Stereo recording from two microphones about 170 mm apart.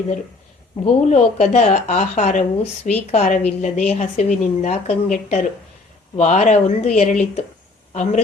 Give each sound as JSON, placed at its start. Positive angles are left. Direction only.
{"t": 0.9, "sound": "speech", "side_deg": 45}